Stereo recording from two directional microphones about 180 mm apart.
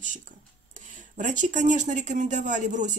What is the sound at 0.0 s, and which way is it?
Speech, 45° right (ahead or behind).